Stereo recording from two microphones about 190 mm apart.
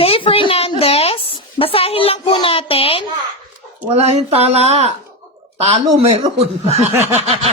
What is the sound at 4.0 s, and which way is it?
Speech, 35° right (ahead or behind).